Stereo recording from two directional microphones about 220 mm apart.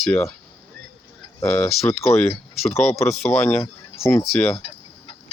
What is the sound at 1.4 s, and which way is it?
Speech, 10° left (ahead or behind).